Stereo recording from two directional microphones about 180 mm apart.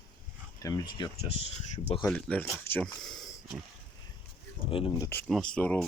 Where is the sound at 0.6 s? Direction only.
25° left (ahead or behind).